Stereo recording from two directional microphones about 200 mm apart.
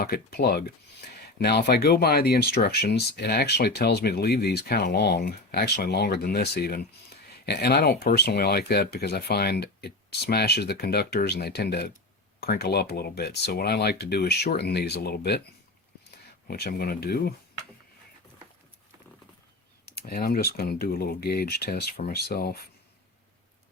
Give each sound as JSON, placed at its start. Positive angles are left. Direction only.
{"t": 0.0, "sound": "speech", "side_deg": 50}
{"t": 16.5, "sound": "speech", "side_deg": 50}
{"t": 19.8, "sound": "speech", "side_deg": 50}